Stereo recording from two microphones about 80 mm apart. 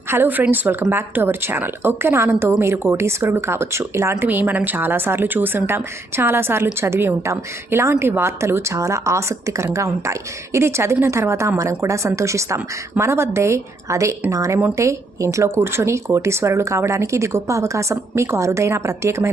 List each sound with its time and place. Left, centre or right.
0.1 s a woman's voice: right
4.2 s a woman's voice: right